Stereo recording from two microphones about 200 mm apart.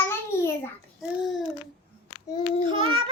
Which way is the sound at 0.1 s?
10° left (ahead or behind).